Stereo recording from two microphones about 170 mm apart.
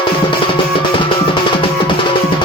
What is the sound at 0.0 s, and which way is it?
Music, 30° left (ahead or behind).